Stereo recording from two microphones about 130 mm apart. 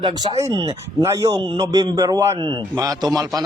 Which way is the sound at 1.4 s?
40° right (ahead or behind).